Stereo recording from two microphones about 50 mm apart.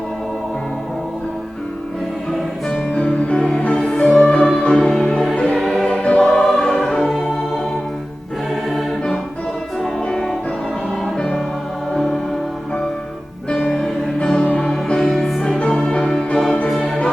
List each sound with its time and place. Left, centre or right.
2.6 s music: centre
5.5 s music: centre
5.9 s music: left
6.2 s music: centre
7.1 s music: centre
10.1 s music: centre
13.5 s music: centre